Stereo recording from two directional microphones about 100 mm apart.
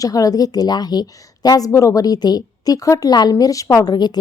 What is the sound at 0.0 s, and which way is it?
A woman's voice, 35° left (ahead or behind).